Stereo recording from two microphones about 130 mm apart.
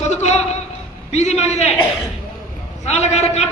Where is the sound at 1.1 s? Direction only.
60° left (ahead or behind).